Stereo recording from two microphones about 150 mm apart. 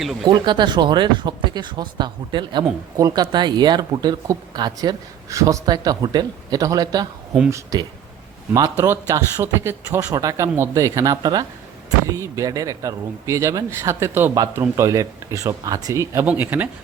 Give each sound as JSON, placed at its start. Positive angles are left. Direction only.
{"t": 0.3, "sound": "speech", "side_deg": -30}